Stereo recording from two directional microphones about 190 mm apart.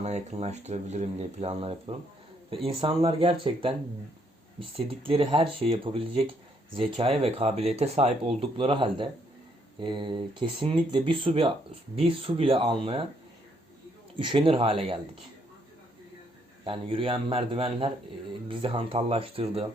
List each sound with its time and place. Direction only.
0.0 s speech: 35° right (ahead or behind)
4.9 s speech: 30° right (ahead or behind)
14.2 s speech: 30° right (ahead or behind)
16.6 s speech: 30° right (ahead or behind)